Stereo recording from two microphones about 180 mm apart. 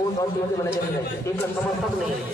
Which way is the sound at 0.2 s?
15° left (ahead or behind).